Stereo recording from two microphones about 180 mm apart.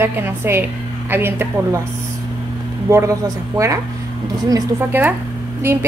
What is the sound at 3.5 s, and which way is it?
A woman's voice, 15° right (ahead or behind).